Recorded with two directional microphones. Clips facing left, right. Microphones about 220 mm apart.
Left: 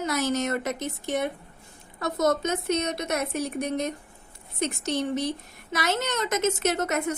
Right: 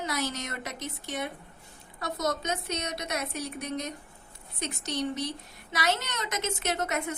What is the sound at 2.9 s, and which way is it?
Speech, 50° left (ahead or behind).